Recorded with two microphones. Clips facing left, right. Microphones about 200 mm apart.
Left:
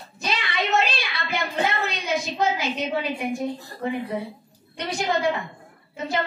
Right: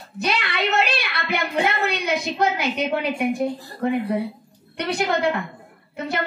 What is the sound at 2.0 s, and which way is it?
A woman's voice, 60° right (ahead or behind).